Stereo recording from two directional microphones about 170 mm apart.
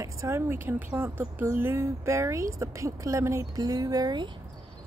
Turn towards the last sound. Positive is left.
turn(degrees=-25)  # may be behind; listen again after turning